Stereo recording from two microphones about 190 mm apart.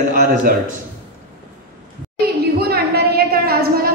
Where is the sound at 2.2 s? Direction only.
55° right (ahead or behind).